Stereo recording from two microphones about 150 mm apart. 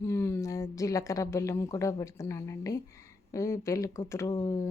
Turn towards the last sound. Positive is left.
turn(degrees=20)  # may be behind; listen again after turning